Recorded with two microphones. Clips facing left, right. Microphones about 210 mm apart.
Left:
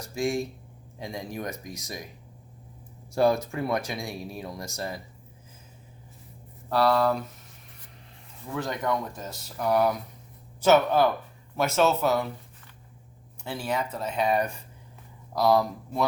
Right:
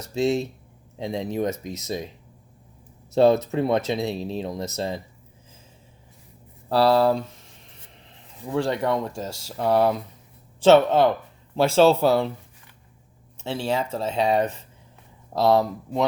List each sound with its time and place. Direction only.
0.0 s speech: 25° right (ahead or behind)
3.1 s speech: 25° right (ahead or behind)
6.7 s speech: 30° right (ahead or behind)
8.4 s speech: 30° right (ahead or behind)
13.4 s speech: 25° right (ahead or behind)